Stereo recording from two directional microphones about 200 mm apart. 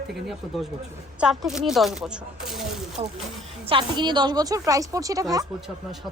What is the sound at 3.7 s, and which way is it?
A woman's voice, 25° right (ahead or behind).